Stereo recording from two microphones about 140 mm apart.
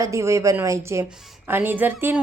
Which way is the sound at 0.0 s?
20° right (ahead or behind).